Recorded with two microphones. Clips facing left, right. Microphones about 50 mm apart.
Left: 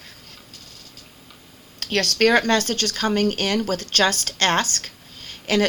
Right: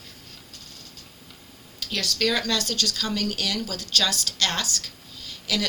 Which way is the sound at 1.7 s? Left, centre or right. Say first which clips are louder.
Left 7 dB; left.